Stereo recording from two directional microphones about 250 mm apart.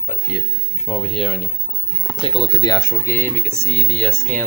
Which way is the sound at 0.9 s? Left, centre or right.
Left.